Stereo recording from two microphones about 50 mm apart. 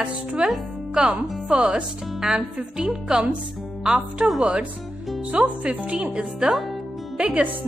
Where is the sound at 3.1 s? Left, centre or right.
Right.